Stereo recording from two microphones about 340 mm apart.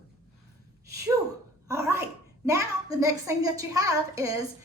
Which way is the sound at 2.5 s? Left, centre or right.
Centre.